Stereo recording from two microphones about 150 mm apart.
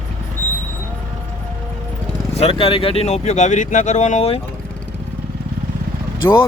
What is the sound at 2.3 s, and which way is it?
Speech, 40° left (ahead or behind).